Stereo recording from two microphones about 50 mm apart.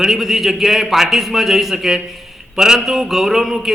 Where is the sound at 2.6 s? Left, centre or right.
Centre.